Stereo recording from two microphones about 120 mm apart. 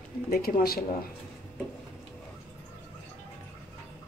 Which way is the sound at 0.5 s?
90° left.